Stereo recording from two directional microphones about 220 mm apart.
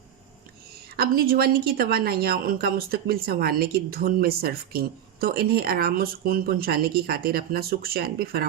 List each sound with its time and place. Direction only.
0.9 s a woman's voice: 45° right (ahead or behind)